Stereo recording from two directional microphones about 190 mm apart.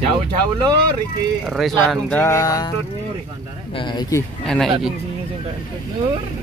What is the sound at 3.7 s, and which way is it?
Speech, 20° left (ahead or behind).